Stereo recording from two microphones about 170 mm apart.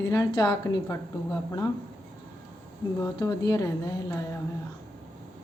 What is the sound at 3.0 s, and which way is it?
Speech, 20° left (ahead or behind).